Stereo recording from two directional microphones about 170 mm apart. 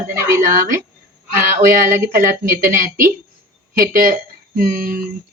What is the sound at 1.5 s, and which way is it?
Speech, 55° right (ahead or behind).